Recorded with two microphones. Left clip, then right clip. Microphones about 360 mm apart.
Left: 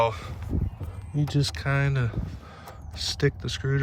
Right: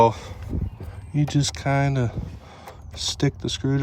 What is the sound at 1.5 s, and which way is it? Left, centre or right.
Speech, centre.